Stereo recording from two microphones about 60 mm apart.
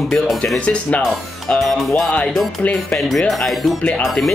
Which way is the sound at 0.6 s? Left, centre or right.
Left.